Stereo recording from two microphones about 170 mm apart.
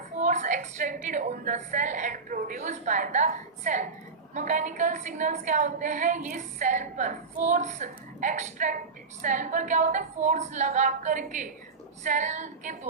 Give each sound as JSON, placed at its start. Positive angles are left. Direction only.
{"t": 0.2, "sound": "a woman's voice", "side_deg": -45}